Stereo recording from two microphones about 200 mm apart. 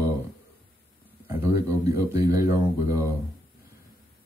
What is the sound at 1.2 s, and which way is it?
Speech, 15° right (ahead or behind).